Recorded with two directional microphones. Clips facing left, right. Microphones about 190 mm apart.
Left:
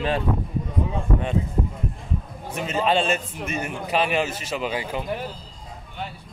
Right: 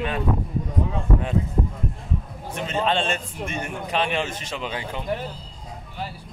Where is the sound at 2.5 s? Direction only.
5° left (ahead or behind).